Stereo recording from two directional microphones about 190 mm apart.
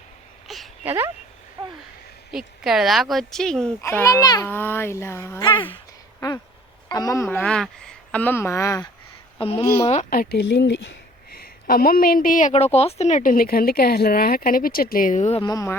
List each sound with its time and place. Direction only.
0.4 s a sound: centre (ahead or behind)
0.9 s speech: 10° right (ahead or behind)
2.3 s a child's voice: 5° right (ahead or behind); by 5.5 s 15° left (ahead or behind)
5.5 s a woman's voice: 25° left (ahead or behind)
6.1 s a child's voice: 15° left (ahead or behind)
9.4 s a woman's voice: 30° left (ahead or behind)
10.0 s speech: 50° left (ahead or behind)
11.3 s a woman's voice: 50° left (ahead or behind)
15.4 s a child's voice: 20° left (ahead or behind)